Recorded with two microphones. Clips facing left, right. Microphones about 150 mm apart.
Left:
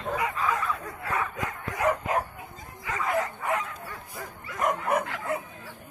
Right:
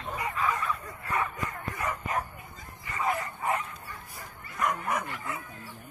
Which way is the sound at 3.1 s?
85° left.